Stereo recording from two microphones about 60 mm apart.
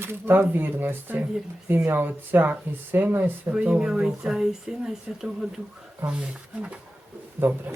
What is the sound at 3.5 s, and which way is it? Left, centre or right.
Speech, centre.